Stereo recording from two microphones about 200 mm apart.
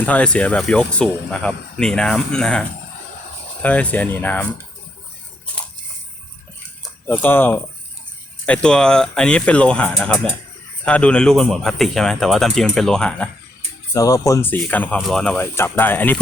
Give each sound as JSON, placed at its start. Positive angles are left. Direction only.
{"t": 0.0, "sound": "speech", "side_deg": 5}
{"t": 7.1, "sound": "speech", "side_deg": 10}
{"t": 13.9, "sound": "speech", "side_deg": 15}